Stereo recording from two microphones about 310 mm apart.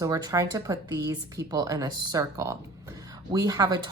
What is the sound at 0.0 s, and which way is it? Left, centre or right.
Speech, centre.